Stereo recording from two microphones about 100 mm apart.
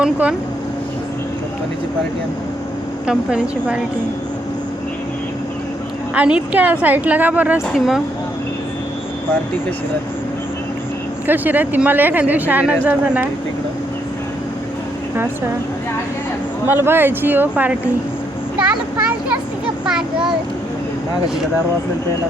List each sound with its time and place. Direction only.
0.0 s speech: 10° right (ahead or behind)
3.1 s speech: 10° right (ahead or behind)
6.1 s speech: 10° right (ahead or behind)
7.7 s speech: 5° right (ahead or behind)
11.3 s speech: 20° right (ahead or behind)
16.6 s speech: 20° right (ahead or behind)
19.8 s a sound: 5° right (ahead or behind)